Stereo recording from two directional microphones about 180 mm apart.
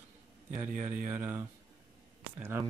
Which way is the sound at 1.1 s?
10° right (ahead or behind).